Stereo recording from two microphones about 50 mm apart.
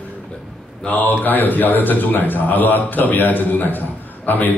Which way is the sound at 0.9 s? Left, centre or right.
Left.